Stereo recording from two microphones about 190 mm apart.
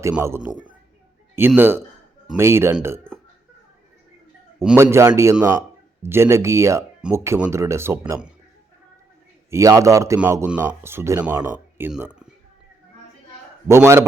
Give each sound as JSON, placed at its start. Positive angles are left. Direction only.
{"t": 0.0, "sound": "speech", "side_deg": -15}
{"t": 4.6, "sound": "speech", "side_deg": -10}
{"t": 9.5, "sound": "speech", "side_deg": -15}
{"t": 13.7, "sound": "speech", "side_deg": -15}